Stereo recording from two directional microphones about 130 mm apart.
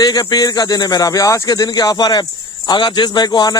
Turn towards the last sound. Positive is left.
turn(degrees=30)  # may be behind; listen again after turning